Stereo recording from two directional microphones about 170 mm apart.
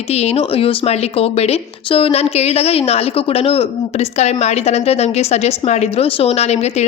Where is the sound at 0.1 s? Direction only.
40° left (ahead or behind).